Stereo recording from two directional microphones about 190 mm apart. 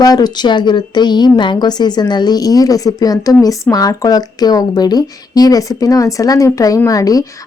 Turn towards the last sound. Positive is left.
turn(degrees=20)  # may be behind; listen again after turning